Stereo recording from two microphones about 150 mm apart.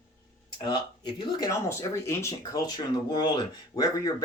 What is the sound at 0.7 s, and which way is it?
Speech, 30° left (ahead or behind).